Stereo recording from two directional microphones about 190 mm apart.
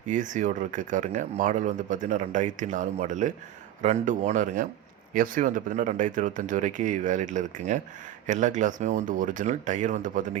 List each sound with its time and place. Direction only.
0.0 s speech: 40° right (ahead or behind)